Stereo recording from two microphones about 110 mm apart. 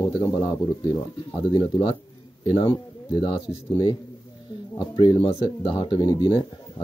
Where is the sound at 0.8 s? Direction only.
45° left (ahead or behind).